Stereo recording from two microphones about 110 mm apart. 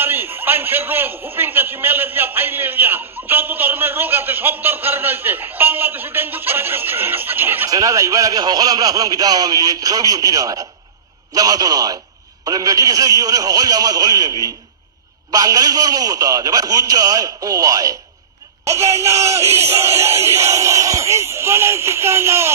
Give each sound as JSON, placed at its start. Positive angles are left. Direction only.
{"t": 0.0, "sound": "a man's voice", "side_deg": -20}
{"t": 7.7, "sound": "a man's voice", "side_deg": -30}